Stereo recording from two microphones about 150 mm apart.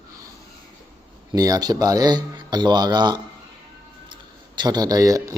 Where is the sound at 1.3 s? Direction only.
25° right (ahead or behind).